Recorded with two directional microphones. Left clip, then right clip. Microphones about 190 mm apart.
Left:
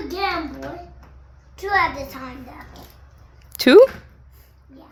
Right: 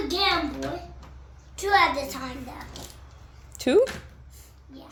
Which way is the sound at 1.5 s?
25° left (ahead or behind).